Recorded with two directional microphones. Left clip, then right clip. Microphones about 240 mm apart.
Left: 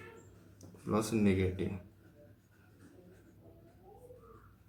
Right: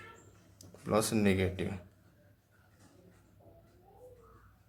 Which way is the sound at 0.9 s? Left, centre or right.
Right.